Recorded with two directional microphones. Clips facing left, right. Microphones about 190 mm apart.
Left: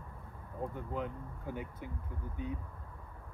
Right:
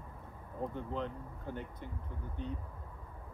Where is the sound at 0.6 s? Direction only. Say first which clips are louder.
Even; 5° left (ahead or behind).